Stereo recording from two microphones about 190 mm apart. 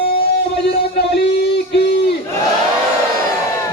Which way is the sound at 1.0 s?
65° left (ahead or behind).